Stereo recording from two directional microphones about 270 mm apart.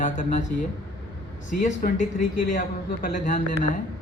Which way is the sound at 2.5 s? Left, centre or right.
Left.